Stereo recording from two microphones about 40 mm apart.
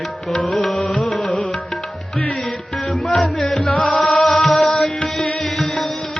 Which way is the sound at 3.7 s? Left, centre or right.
Left.